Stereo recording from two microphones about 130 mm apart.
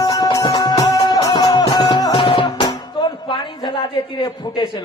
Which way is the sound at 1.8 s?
45° left (ahead or behind).